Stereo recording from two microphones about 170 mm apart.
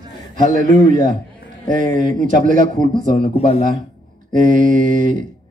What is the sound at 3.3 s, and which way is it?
Speech, 35° left (ahead or behind).